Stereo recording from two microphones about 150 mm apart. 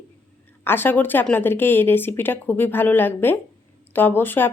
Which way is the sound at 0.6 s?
15° left (ahead or behind).